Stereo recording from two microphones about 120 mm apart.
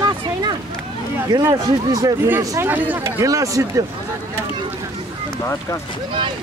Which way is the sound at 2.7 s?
15° right (ahead or behind).